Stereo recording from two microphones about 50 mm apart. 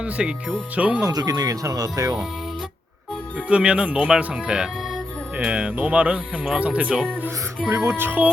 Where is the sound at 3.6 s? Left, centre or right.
Centre.